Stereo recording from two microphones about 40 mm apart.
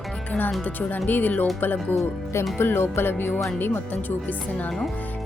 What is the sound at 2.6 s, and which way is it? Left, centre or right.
Music, left.